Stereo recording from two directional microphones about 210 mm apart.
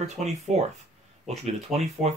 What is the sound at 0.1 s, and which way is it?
Speech, 30° right (ahead or behind).